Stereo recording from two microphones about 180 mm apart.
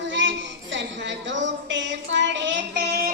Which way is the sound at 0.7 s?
80° right.